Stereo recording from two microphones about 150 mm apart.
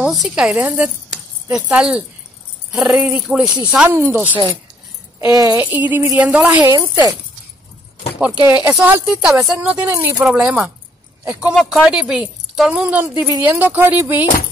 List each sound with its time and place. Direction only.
0.0 s speech: 5° right (ahead or behind); by 5.5 s 25° right (ahead or behind)
5.5 s speech: 10° right (ahead or behind)
6.6 s speech: 25° right (ahead or behind)
8.5 s speech: 10° right (ahead or behind)